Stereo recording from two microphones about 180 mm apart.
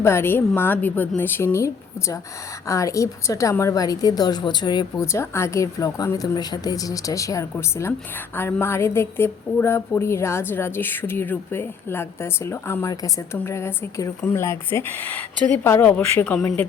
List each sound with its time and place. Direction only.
0.0 s a woman's voice: 15° left (ahead or behind)
16.4 s a woman's voice: 20° left (ahead or behind)